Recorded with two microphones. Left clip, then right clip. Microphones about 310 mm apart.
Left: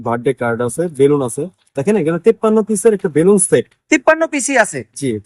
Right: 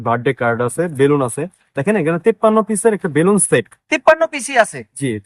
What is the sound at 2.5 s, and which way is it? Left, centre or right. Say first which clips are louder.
Speech: left 1 dB; right.